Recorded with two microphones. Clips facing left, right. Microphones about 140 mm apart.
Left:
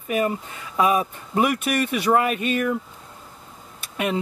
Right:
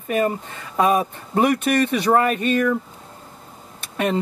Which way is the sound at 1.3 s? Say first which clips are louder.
Right 3 dB; 10° left (ahead or behind).